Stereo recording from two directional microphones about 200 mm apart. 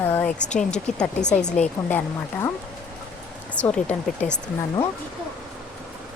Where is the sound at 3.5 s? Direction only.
5° left (ahead or behind).